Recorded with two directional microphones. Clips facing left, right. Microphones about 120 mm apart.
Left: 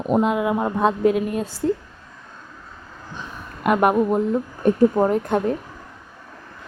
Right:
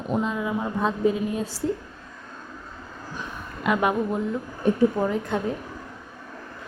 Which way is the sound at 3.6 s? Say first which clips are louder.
Left 5 dB; 55° left (ahead or behind).